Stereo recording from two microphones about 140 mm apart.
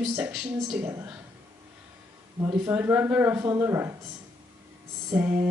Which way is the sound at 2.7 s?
10° right (ahead or behind).